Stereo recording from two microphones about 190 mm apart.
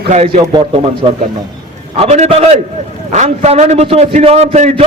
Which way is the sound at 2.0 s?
35° right (ahead or behind).